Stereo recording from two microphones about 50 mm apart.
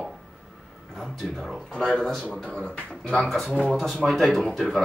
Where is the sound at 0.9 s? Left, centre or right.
Centre.